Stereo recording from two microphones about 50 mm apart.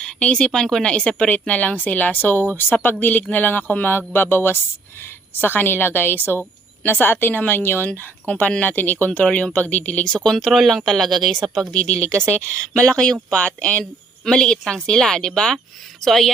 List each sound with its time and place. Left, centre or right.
0.0 s speech: centre; by 7.9 s left
7.9 s speech: left
10.1 s speech: centre
10.3 s a woman's voice: centre
11.7 s speech: centre
13.3 s speech: left
14.3 s speech: centre